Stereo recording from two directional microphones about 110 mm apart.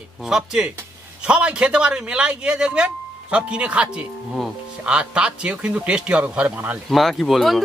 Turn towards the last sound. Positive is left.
turn(degrees=0)  # may be behind; listen again after turning